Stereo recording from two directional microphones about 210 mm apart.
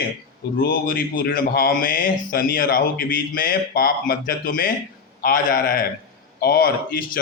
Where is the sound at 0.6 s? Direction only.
45° left (ahead or behind).